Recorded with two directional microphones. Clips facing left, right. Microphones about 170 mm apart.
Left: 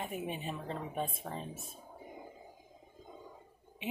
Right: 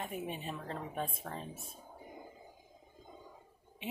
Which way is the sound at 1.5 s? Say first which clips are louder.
Left 2 dB; 25° left (ahead or behind).